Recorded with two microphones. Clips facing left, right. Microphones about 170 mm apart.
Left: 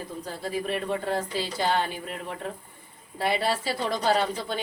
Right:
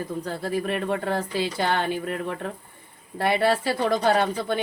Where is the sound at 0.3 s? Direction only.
60° right (ahead or behind).